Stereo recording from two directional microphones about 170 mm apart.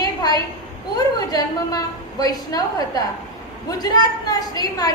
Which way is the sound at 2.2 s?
20° left (ahead or behind).